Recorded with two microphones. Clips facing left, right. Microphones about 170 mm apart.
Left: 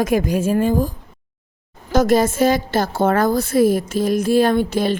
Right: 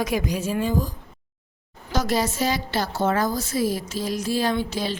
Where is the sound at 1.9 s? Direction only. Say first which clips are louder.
Left 8 dB; 50° left (ahead or behind).